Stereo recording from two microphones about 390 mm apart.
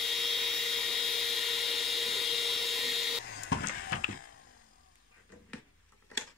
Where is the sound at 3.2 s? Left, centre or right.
Left.